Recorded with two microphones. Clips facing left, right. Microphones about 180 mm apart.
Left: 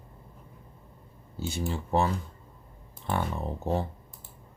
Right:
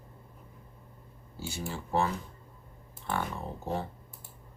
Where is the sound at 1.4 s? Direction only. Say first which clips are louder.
Left 5 dB; 20° left (ahead or behind).